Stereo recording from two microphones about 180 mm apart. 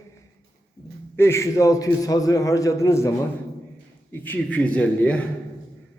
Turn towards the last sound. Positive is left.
turn(degrees=5)  # may be behind; listen again after turning